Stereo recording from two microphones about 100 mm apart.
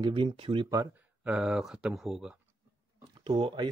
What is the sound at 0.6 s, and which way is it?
Speech, 30° right (ahead or behind).